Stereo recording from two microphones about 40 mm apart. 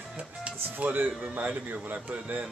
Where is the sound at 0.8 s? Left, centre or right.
Right.